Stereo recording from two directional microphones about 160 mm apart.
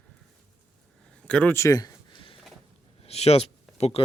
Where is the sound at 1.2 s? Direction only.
5° left (ahead or behind); by 4.0 s 35° left (ahead or behind).